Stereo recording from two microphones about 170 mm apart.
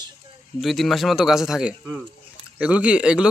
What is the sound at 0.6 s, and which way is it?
Speech, centre (ahead or behind).